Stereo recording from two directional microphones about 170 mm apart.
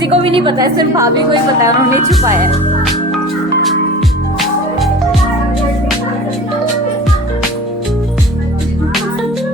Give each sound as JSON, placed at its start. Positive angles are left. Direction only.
{"t": 0.0, "sound": "a woman's voice", "side_deg": -35}